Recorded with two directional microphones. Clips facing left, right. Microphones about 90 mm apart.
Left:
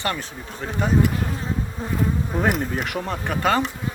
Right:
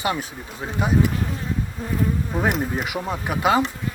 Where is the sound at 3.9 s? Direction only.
25° left (ahead or behind).